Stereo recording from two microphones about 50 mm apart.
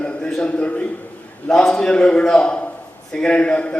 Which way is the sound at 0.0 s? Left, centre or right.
Centre.